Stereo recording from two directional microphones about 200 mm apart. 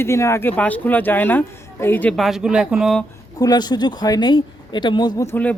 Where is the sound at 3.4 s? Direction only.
20° left (ahead or behind).